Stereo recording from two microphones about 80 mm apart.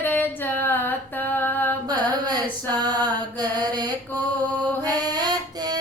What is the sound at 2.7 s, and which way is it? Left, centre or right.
Mantra, right.